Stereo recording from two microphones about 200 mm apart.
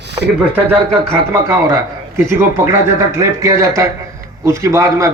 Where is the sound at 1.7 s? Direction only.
15° right (ahead or behind).